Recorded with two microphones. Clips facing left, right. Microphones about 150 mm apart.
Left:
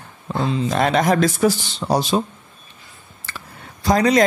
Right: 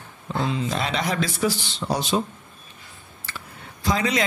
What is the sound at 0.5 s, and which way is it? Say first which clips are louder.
Speech: left 7 dB; 45° left (ahead or behind).